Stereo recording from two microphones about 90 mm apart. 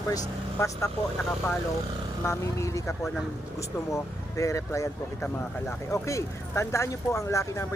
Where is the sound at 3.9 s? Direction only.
35° left (ahead or behind).